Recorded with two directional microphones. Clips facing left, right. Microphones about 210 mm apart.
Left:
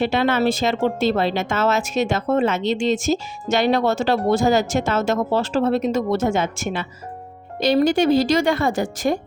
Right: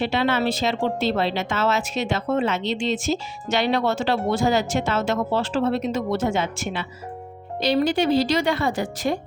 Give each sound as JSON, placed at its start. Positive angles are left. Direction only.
{"t": 0.0, "sound": "speech", "side_deg": 50}